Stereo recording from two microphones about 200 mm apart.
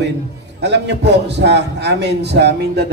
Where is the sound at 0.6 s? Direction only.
60° right (ahead or behind).